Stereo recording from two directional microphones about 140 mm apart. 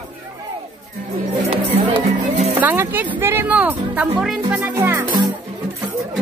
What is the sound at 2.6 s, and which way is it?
Speech, 15° right (ahead or behind).